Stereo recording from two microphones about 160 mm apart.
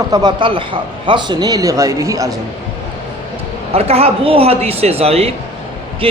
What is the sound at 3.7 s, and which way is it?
Speech, 40° right (ahead or behind).